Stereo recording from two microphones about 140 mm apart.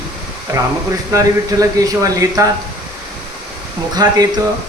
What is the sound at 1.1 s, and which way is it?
Speech, 25° right (ahead or behind).